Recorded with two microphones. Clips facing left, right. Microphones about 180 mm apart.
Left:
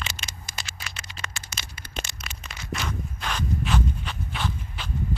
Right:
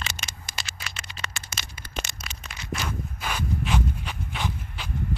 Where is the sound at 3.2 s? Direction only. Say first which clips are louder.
Left 1 dB; 10° right (ahead or behind).